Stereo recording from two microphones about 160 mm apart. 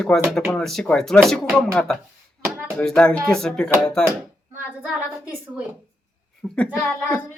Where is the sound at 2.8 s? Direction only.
5° left (ahead or behind).